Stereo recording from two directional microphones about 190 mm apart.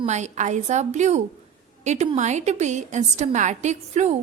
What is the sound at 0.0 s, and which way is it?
A woman's voice, 35° right (ahead or behind).